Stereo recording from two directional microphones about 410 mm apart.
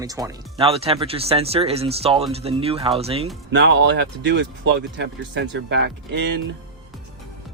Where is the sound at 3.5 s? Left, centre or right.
Right.